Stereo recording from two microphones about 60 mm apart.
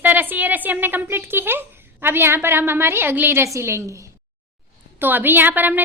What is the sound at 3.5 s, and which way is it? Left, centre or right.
Speech, right.